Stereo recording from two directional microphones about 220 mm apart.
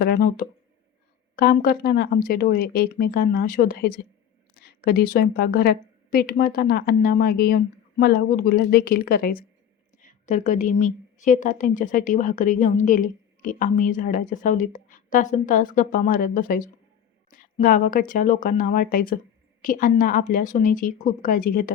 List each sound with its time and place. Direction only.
0.0 s a woman's voice: 40° left (ahead or behind)